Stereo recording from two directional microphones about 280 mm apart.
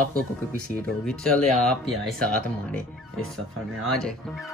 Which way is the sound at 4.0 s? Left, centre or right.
Centre.